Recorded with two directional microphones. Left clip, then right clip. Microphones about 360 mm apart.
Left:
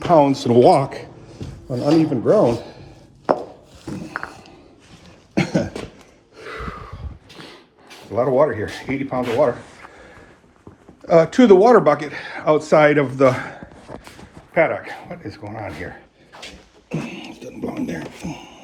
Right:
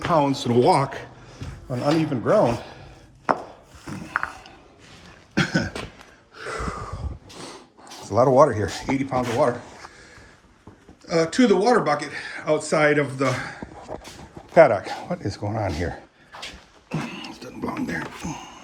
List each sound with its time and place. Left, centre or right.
0.0 s speech: centre
3.8 s a sound: centre
5.5 s cough: centre
6.5 s gasp: right
8.1 s speech: centre
11.0 s speech: centre
13.9 s dog: left
14.5 s a man's voice: centre
16.3 s a sound: centre